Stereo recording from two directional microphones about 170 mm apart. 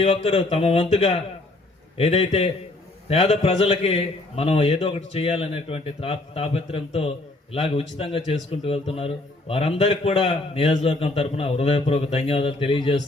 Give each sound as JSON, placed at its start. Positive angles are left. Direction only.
{"t": 0.0, "sound": "a man's voice", "side_deg": 40}